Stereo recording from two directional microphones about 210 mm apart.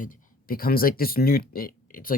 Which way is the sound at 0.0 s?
40° left (ahead or behind).